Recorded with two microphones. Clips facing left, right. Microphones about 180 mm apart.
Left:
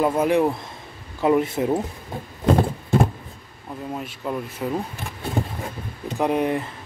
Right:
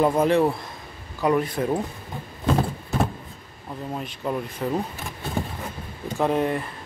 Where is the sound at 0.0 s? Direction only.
5° left (ahead or behind).